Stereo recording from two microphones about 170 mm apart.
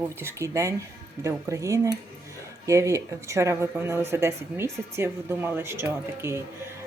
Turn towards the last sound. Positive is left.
turn(degrees=-15)  # may be behind; listen again after turning